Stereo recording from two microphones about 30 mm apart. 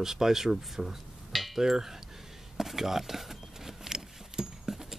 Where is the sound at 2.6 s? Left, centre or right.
Centre.